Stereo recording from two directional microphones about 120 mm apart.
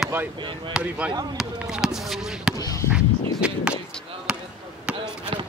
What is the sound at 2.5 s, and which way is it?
Basketball bounce, 25° left (ahead or behind).